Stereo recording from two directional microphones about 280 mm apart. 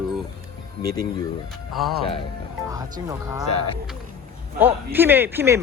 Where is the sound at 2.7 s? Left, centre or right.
Centre.